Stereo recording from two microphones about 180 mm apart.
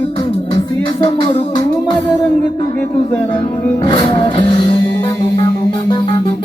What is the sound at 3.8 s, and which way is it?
Music, 25° left (ahead or behind).